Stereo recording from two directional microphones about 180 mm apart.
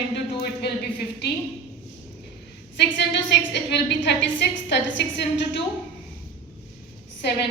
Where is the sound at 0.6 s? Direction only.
65° left (ahead or behind).